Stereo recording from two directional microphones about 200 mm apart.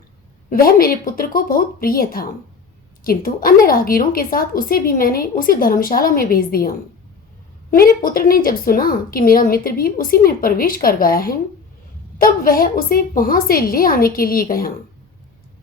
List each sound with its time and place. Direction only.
0.5 s a woman's voice: 45° left (ahead or behind)